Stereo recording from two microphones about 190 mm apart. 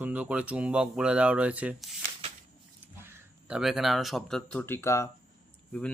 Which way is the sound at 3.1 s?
10° right (ahead or behind).